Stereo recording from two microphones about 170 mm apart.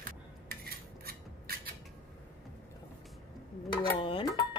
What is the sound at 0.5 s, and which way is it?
Cutlery, 65° right (ahead or behind).